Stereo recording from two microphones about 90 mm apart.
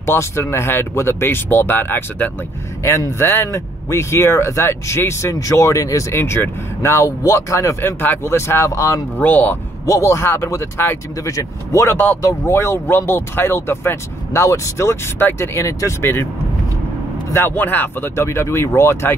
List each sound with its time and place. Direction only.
0.0 s speech: 30° left (ahead or behind)
2.8 s speech: 30° left (ahead or behind)
9.2 s speech: 20° left (ahead or behind)
9.8 s speech: 35° left (ahead or behind)
17.3 s speech: 25° left (ahead or behind)